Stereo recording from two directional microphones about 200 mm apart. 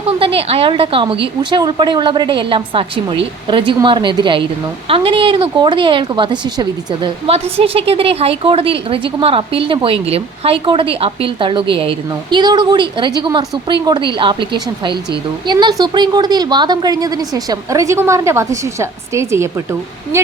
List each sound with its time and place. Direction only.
0.2 s speech: 30° right (ahead or behind)